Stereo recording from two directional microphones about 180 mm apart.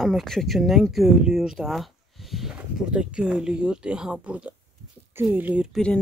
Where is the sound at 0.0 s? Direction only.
Centre (ahead or behind).